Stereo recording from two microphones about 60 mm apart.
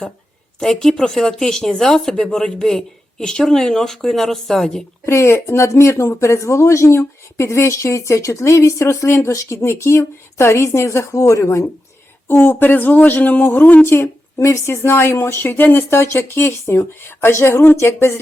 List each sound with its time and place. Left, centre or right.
0.6 s speech: centre
5.0 s speech: left
12.3 s speech: left
13.9 s speech: left